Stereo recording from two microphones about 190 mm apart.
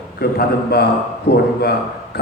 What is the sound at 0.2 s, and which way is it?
A man's voice, 55° left (ahead or behind).